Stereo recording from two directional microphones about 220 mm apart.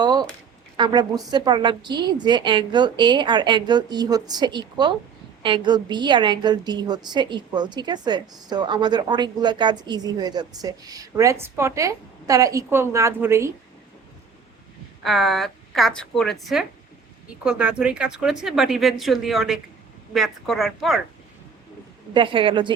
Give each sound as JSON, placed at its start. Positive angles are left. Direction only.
{"t": 0.0, "sound": "a sound", "side_deg": -20}
{"t": 0.8, "sound": "a woman's voice", "side_deg": -20}
{"t": 15.0, "sound": "a woman's voice", "side_deg": 0}
{"t": 22.1, "sound": "a woman's voice", "side_deg": -20}